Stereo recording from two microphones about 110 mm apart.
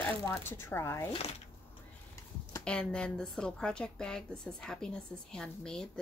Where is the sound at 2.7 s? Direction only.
10° left (ahead or behind).